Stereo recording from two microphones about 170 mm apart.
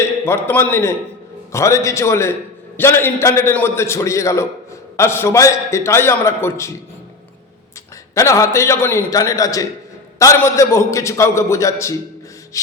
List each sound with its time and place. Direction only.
0.0 s a man's voice: 15° left (ahead or behind)
8.1 s a man's voice: 20° left (ahead or behind)